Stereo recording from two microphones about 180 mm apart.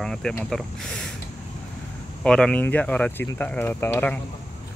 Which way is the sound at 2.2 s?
5° left (ahead or behind).